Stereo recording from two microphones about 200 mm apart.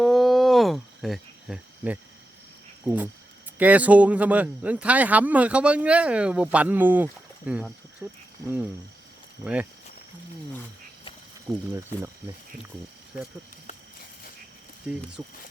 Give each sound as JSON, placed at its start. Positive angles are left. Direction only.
{"t": 0.0, "sound": "cricket", "side_deg": 0}
{"t": 2.8, "sound": "speech", "side_deg": -10}
{"t": 9.4, "sound": "speech", "side_deg": -5}
{"t": 11.5, "sound": "speech", "side_deg": -15}
{"t": 14.9, "sound": "speech", "side_deg": -5}